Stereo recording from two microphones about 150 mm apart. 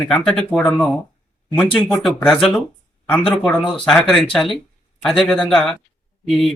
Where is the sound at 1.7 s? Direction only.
30° left (ahead or behind).